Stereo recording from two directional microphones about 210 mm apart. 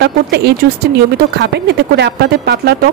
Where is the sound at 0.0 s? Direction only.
50° right (ahead or behind).